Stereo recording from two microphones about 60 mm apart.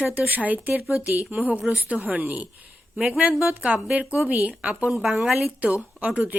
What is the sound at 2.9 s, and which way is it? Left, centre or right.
Speech, centre.